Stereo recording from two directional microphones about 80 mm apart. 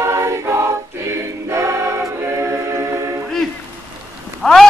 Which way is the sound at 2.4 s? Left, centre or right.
Right.